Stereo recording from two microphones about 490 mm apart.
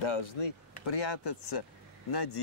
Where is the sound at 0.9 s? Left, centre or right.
Left.